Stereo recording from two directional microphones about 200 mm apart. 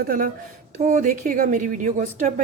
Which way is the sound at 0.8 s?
35° right (ahead or behind).